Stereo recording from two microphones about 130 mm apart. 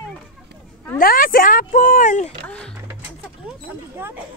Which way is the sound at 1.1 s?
90° left.